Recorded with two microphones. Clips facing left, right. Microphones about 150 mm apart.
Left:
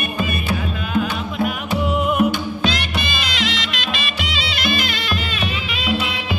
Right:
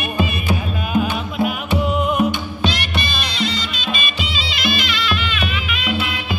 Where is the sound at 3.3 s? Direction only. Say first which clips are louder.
Right 3 dB; 90° left; by 4.5 s 75° left (ahead or behind).